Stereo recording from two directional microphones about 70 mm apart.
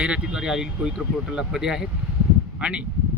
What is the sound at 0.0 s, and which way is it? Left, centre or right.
Speech, centre.